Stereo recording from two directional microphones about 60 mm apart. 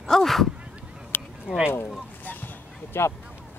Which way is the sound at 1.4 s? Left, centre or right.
Centre.